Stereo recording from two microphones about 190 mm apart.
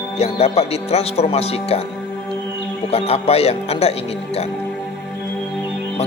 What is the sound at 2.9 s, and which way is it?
Music, 30° left (ahead or behind).